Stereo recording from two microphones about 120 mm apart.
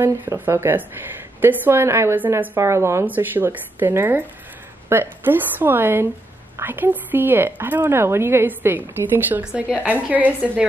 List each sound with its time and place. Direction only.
0.0 s a woman's voice: 20° right (ahead or behind)